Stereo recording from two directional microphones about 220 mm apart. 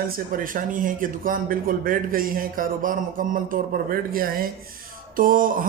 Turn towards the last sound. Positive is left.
turn(degrees=-40)  # may be behind; listen again after turning